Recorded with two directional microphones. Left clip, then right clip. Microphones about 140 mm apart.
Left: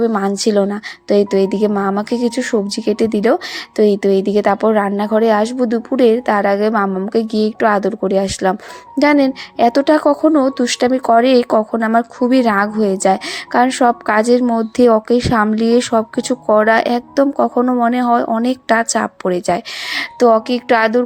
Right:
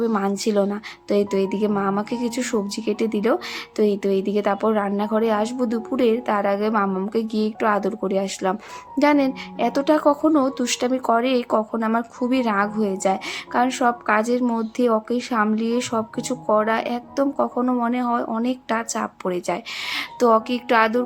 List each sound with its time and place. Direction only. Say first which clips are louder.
0.0 s speech: left 7 dB; 35° left (ahead or behind)